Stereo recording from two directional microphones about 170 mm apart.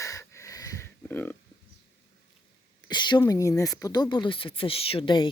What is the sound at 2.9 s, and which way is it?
A woman's voice, 25° left (ahead or behind).